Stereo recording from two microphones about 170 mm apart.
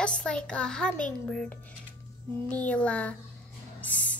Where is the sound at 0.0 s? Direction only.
5° left (ahead or behind).